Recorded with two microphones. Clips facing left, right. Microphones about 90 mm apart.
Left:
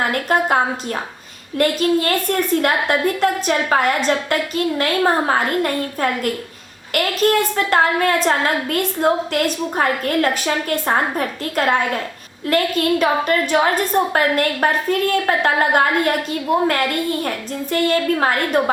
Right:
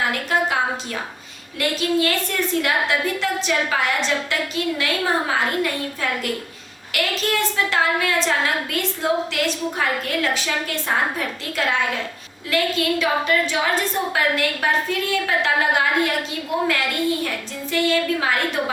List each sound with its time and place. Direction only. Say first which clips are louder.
0.0 s child singing: left 3 dB; 50° left (ahead or behind)